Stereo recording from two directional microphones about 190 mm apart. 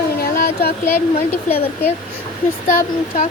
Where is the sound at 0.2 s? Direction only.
55° left (ahead or behind).